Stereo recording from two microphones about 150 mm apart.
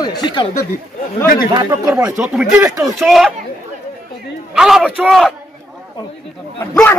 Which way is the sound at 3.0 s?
Centre (ahead or behind).